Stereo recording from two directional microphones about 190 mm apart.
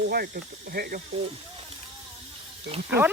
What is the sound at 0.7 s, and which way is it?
Speech, 55° right (ahead or behind).